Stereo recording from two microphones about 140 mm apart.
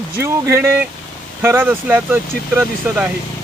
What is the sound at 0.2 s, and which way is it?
Speech, 15° right (ahead or behind).